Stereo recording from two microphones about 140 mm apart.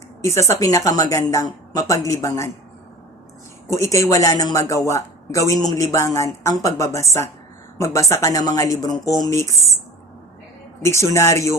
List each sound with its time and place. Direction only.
0.3 s speech: 20° left (ahead or behind)
3.7 s speech: 20° left (ahead or behind)
10.8 s speech: 20° left (ahead or behind)